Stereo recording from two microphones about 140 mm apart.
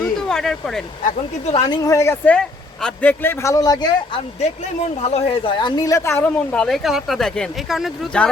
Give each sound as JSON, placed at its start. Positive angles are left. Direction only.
{"t": 0.0, "sound": "a sound", "side_deg": 5}
{"t": 1.5, "sound": "speech", "side_deg": 40}
{"t": 1.8, "sound": "a man's voice", "side_deg": 20}
{"t": 4.4, "sound": "speech", "side_deg": 50}
{"t": 6.3, "sound": "speech", "side_deg": 5}